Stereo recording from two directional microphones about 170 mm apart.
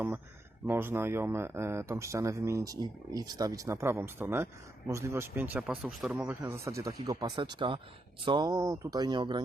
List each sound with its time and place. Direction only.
0.7 s speech: 15° right (ahead or behind)